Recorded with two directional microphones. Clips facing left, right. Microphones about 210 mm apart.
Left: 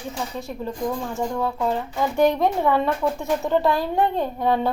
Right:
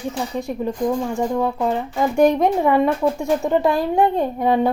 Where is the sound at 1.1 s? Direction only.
15° right (ahead or behind).